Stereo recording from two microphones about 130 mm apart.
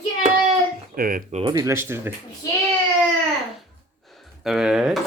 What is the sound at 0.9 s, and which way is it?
Speech, 90° right.